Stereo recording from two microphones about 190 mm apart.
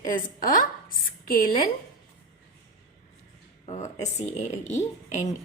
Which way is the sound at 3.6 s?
35° left (ahead or behind).